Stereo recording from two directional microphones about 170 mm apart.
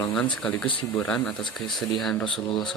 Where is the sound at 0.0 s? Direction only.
5° left (ahead or behind).